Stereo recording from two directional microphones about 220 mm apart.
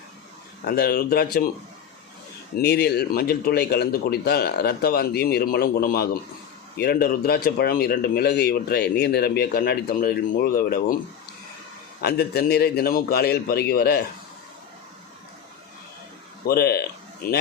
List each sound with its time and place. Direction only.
0.6 s speech: 45° left (ahead or behind)
2.6 s speech: 50° left (ahead or behind)
12.0 s speech: 45° left (ahead or behind)
16.5 s speech: 45° left (ahead or behind)